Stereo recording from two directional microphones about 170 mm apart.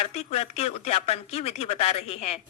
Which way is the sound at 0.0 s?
40° left (ahead or behind).